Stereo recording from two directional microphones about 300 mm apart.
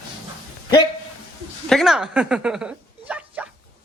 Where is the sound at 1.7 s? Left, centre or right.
Centre.